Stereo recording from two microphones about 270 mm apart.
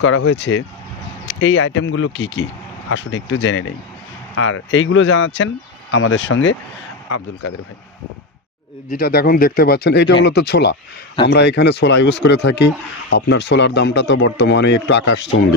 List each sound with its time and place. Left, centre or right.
0.0 s speech: left
7.1 s speech: left
8.9 s speech: left